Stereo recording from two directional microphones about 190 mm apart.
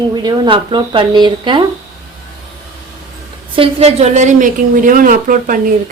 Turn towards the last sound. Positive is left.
turn(degrees=-45)  # may be behind; listen again after turning